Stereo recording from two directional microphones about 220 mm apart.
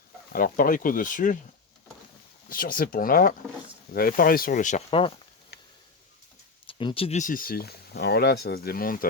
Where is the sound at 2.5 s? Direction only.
40° left (ahead or behind); by 5.1 s 25° left (ahead or behind).